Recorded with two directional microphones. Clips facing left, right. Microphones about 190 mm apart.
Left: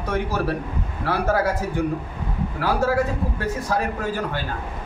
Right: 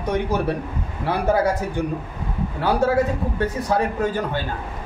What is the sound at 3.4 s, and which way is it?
A man's voice, 20° right (ahead or behind).